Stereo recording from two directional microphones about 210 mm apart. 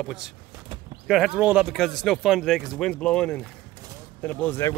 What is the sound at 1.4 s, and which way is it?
Speech, 5° right (ahead or behind).